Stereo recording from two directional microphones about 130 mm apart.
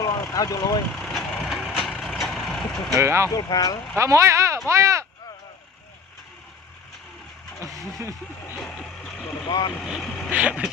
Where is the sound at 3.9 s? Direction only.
20° right (ahead or behind).